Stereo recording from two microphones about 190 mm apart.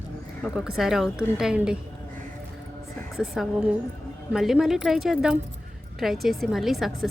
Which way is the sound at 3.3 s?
Centre (ahead or behind).